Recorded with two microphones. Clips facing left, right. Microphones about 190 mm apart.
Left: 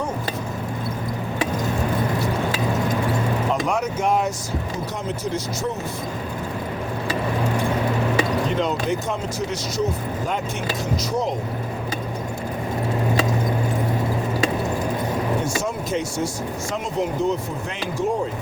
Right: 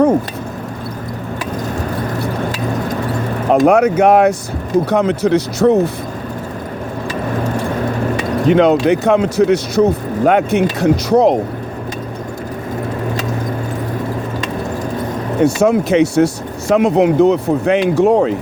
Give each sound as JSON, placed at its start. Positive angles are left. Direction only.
{"t": 3.5, "sound": "speech", "side_deg": -60}
{"t": 8.4, "sound": "speech", "side_deg": -70}
{"t": 15.6, "sound": "speech", "side_deg": -70}